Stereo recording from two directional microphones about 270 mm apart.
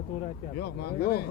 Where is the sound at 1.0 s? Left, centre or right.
Left.